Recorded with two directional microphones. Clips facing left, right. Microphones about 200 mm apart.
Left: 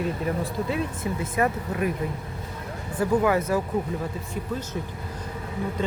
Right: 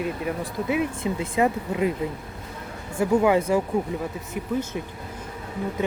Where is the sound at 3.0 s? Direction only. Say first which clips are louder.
Right 2 dB; 10° right (ahead or behind).